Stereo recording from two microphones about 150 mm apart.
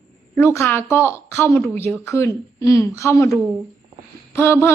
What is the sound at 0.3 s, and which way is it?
Speech, 15° left (ahead or behind).